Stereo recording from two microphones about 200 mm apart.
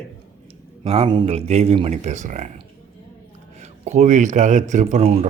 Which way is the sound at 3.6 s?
35° right (ahead or behind).